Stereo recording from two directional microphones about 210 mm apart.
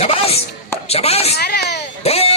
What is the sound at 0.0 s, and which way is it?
Chopping, 30° left (ahead or behind).